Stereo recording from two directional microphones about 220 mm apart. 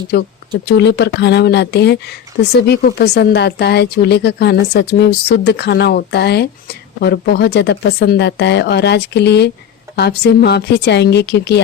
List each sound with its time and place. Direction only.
0.5 s speech: 50° left (ahead or behind)